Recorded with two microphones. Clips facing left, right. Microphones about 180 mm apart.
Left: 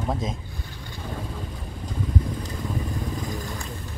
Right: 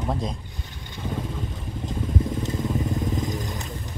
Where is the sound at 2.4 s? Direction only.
20° right (ahead or behind).